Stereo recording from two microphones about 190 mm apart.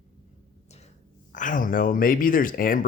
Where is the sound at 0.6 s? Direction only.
35° left (ahead or behind).